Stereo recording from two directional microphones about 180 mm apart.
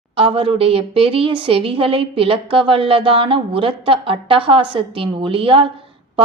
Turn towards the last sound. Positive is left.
turn(degrees=-30)  # may be behind; listen again after turning